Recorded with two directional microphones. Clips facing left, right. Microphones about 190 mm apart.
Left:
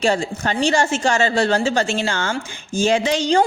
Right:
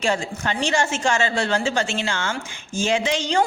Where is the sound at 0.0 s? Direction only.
35° left (ahead or behind).